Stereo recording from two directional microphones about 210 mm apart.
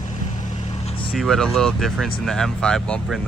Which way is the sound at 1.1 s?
Centre (ahead or behind).